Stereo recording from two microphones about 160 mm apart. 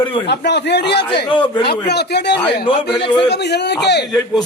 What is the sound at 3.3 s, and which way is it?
Speech, 90° left.